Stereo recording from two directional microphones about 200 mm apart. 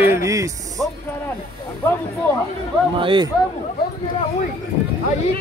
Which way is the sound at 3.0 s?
25° right (ahead or behind).